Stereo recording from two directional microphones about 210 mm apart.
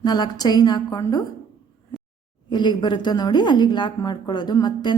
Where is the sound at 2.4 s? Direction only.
20° left (ahead or behind).